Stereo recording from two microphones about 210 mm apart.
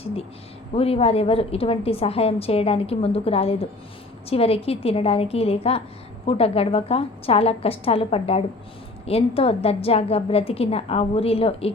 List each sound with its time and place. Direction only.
0.8 s a woman's voice: 30° left (ahead or behind)